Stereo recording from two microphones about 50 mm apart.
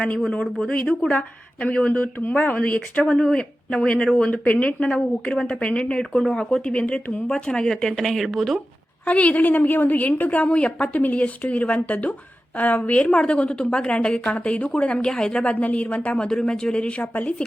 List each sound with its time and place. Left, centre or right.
0.7 s a woman's voice: left
3.1 s a woman's voice: centre
6.7 s speech: left; by 8.6 s centre
9.0 s a woman's voice: left
15.4 s a woman's voice: left
16.1 s speech: centre